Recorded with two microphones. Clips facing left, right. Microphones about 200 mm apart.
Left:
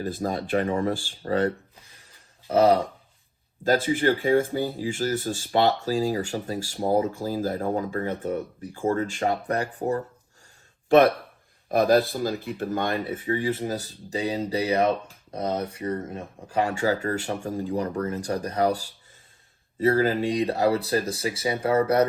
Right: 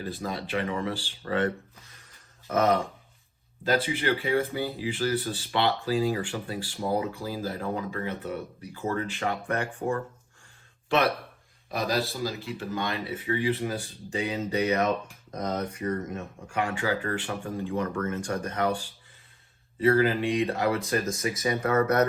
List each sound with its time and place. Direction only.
0.0 s speech: 45° left (ahead or behind)
3.6 s speech: 45° left (ahead or behind)
10.8 s speech: 50° left (ahead or behind); by 22.0 s 30° left (ahead or behind)